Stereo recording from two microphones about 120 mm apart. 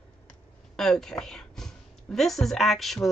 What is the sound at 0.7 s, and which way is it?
A woman's voice, 5° left (ahead or behind).